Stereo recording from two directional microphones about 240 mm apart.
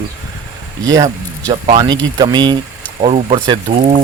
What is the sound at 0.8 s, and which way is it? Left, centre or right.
Speech, centre.